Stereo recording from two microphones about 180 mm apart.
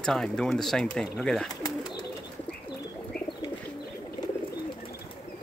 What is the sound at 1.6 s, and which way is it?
Bird, 20° left (ahead or behind).